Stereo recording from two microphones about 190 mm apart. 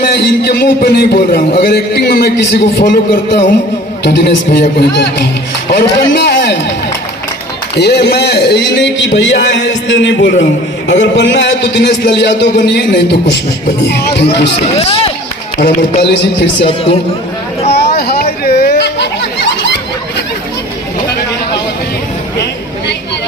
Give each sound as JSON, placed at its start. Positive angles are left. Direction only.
{"t": 0.0, "sound": "a man's voice", "side_deg": 55}
{"t": 7.8, "sound": "a man's voice", "side_deg": 60}
{"t": 14.6, "sound": "speech", "side_deg": 30}
{"t": 16.0, "sound": "speech", "side_deg": 65}
{"t": 16.6, "sound": "speech", "side_deg": 30}
{"t": 17.7, "sound": "a sound", "side_deg": 60}